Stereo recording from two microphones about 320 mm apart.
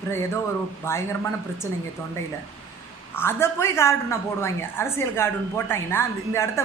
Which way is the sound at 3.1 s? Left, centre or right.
Centre.